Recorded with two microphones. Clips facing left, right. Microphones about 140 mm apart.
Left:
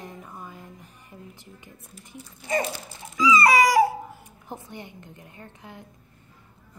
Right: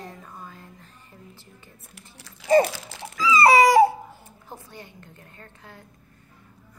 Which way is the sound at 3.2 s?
30° right (ahead or behind).